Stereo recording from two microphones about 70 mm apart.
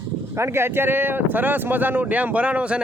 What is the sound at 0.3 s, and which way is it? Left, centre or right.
Speech, right.